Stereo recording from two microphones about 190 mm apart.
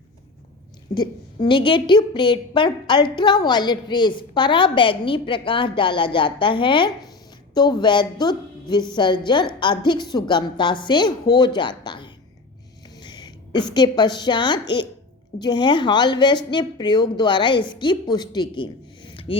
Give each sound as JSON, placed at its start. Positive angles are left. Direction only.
{"t": 0.9, "sound": "a woman's voice", "side_deg": 25}